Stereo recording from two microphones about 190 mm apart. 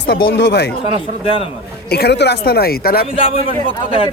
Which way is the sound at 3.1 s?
30° left (ahead or behind).